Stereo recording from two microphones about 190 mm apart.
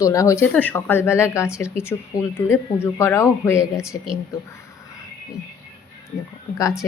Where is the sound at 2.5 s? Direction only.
15° left (ahead or behind).